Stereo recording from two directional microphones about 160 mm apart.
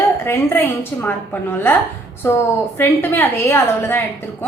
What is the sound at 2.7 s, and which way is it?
A woman's voice, 15° left (ahead or behind).